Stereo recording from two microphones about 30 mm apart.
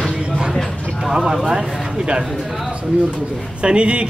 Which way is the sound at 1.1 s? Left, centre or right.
Centre.